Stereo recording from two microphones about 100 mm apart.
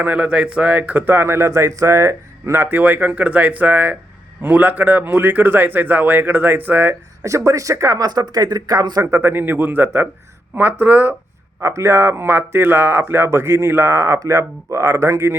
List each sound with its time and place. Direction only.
0.0 s speech: 15° right (ahead or behind)
7.3 s speech: 30° right (ahead or behind)
9.0 s speech: 25° right (ahead or behind)
11.6 s speech: 30° right (ahead or behind)